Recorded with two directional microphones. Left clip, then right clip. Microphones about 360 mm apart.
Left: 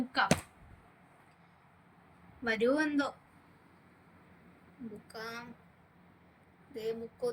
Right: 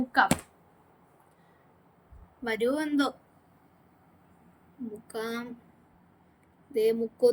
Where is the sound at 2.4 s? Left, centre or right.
Right.